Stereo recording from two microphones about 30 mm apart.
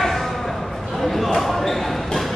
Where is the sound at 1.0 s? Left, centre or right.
Centre.